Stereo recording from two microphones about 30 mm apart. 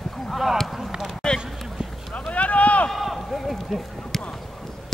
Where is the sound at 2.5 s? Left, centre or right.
Left.